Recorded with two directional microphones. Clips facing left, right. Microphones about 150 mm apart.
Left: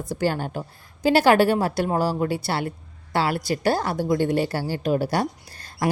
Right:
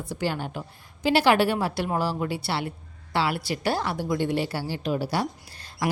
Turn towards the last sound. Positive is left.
turn(degrees=45)  # may be behind; listen again after turning